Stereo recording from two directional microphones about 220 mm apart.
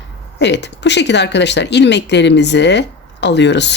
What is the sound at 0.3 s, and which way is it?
Speech, 50° left (ahead or behind).